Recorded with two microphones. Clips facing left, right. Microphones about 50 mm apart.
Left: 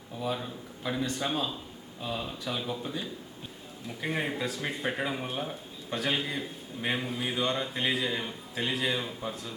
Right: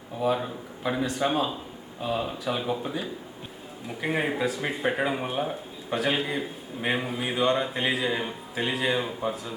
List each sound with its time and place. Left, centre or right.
0.2 s speech: centre
1.0 s speech: centre
1.3 s speech: centre